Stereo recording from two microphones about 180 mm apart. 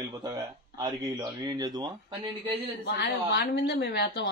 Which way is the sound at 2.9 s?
60° left (ahead or behind).